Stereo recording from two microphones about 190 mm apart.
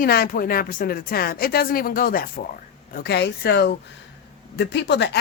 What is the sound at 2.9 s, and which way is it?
Speech, 60° left (ahead or behind).